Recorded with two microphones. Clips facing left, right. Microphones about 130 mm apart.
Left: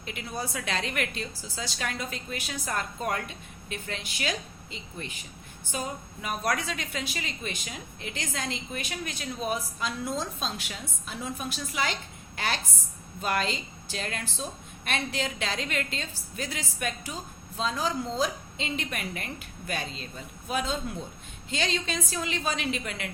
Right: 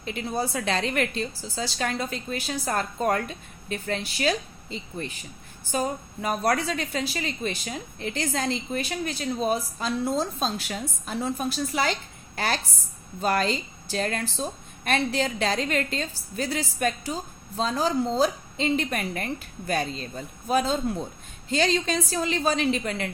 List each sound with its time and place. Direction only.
0.0 s a woman's voice: 35° right (ahead or behind)